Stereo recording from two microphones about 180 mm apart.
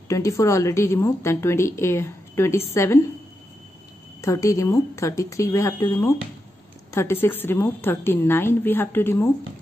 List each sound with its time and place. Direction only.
0.1 s a woman's voice: 15° left (ahead or behind)
4.2 s a woman's voice: 15° left (ahead or behind)